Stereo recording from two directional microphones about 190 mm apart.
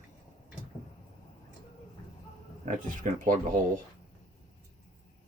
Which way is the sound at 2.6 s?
40° right (ahead or behind).